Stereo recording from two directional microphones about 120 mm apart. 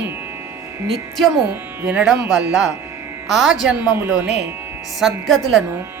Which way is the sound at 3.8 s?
15° right (ahead or behind).